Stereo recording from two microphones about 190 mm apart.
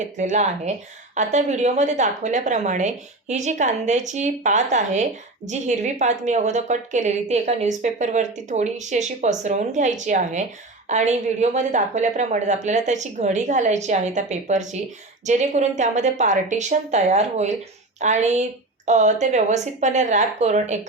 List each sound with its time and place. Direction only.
0.0 s a woman's voice: 40° right (ahead or behind)